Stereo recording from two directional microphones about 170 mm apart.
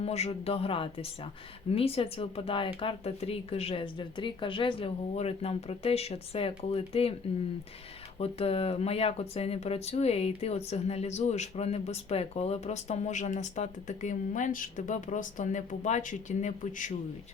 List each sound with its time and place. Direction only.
0.0 s speech: 40° left (ahead or behind)
8.2 s speech: 35° left (ahead or behind)